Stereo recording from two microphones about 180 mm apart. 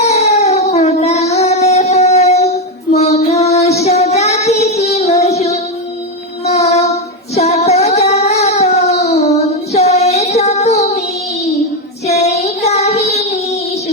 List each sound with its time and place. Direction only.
0.0 s a sound: 35° left (ahead or behind)
2.9 s child singing: 35° left (ahead or behind)
6.4 s music: 35° left (ahead or behind)
7.3 s child singing: 35° left (ahead or behind)
12.0 s child singing: 35° left (ahead or behind)